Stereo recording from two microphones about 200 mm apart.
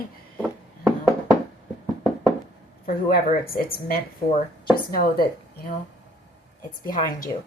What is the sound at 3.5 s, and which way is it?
Speech, 50° left (ahead or behind).